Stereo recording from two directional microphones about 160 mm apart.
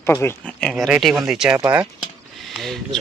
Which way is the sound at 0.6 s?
Centre (ahead or behind).